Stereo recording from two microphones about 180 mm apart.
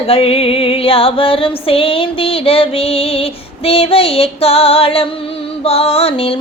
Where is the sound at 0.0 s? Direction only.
30° left (ahead or behind).